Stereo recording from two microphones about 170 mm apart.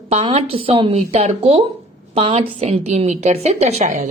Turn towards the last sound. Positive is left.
turn(degrees=-40)  # may be behind; listen again after turning